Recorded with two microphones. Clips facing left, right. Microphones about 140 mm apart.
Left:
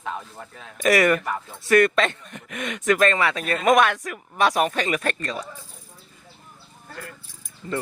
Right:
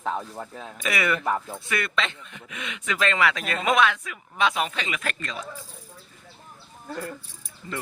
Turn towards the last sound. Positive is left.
turn(degrees=35)  # may be behind; listen again after turning